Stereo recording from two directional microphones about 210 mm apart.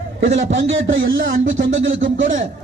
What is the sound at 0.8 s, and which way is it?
A man's voice, 45° right (ahead or behind).